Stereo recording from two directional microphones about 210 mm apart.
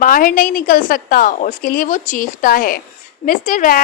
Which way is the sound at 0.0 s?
40° left (ahead or behind).